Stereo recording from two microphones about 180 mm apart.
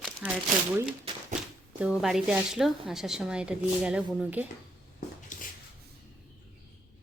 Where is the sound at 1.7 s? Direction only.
5° right (ahead or behind).